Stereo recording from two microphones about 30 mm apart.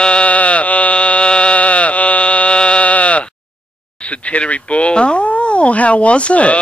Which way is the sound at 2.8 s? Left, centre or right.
Left.